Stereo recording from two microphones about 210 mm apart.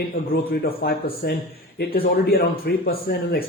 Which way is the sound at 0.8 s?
45° left (ahead or behind).